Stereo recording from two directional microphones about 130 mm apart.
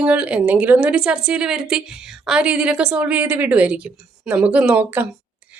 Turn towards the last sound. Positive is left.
turn(degrees=-10)  # may be behind; listen again after turning